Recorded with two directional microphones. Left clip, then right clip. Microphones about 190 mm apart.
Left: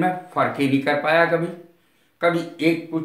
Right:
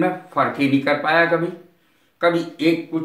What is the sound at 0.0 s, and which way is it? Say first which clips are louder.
A man's voice: right 1 dB; 15° left (ahead or behind).